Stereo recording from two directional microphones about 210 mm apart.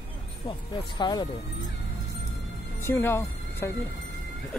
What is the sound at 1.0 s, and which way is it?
Speech, 20° left (ahead or behind).